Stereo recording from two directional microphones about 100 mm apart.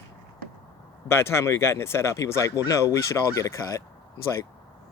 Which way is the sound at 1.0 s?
25° left (ahead or behind).